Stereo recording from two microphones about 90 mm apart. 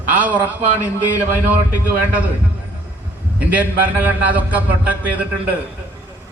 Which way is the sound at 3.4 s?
15° right (ahead or behind).